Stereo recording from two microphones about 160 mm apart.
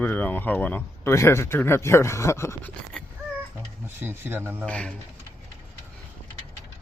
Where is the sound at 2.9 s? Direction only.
5° left (ahead or behind).